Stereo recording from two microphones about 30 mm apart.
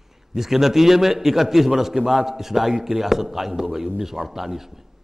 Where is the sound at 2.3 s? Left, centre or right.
Centre.